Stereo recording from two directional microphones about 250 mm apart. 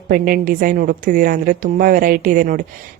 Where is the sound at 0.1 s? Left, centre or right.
Right.